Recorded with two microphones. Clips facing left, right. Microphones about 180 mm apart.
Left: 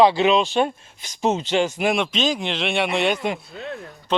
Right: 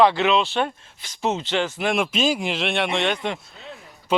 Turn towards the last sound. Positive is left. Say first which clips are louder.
# right 1 dB
turn(degrees=-10)  # may be behind; listen again after turning